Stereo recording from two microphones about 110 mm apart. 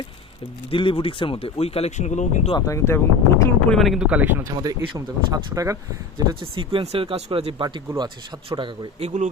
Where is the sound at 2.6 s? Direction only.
30° left (ahead or behind).